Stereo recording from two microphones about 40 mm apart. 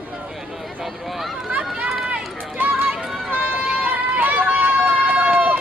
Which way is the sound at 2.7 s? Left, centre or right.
Right.